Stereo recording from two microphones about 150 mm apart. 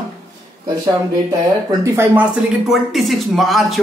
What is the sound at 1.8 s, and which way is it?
Speech, 15° right (ahead or behind).